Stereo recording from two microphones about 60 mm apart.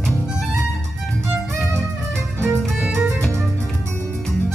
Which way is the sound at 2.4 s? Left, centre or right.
Right.